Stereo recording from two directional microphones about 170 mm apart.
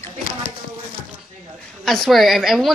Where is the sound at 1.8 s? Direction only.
Centre (ahead or behind).